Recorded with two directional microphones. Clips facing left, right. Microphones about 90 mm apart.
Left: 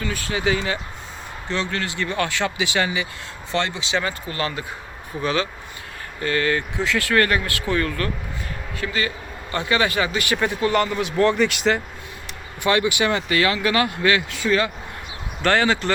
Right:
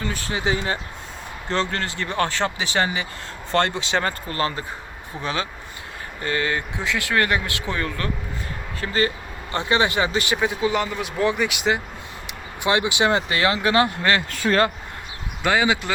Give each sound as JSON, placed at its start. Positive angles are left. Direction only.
{"t": 0.0, "sound": "speech", "side_deg": -30}
{"t": 3.5, "sound": "speech", "side_deg": -50}
{"t": 8.8, "sound": "speech", "side_deg": -35}
{"t": 10.3, "sound": "speech", "side_deg": -10}
{"t": 12.6, "sound": "speech", "side_deg": -20}
{"t": 15.4, "sound": "speech", "side_deg": -10}